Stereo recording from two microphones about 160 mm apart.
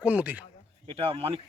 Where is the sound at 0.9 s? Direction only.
35° right (ahead or behind).